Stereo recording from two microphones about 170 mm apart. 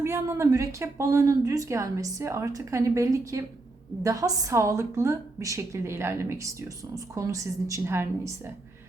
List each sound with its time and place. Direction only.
0.0 s a woman's voice: 15° right (ahead or behind)